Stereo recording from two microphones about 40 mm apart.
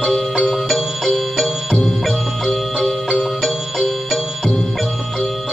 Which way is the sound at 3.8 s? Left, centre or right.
Centre.